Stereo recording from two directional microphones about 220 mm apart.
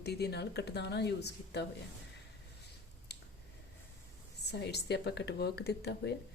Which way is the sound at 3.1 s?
50° left (ahead or behind).